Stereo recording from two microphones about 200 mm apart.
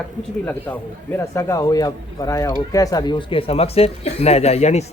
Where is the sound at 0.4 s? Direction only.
10° left (ahead or behind).